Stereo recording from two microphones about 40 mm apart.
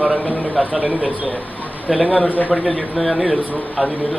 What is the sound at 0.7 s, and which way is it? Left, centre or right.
Speech, right.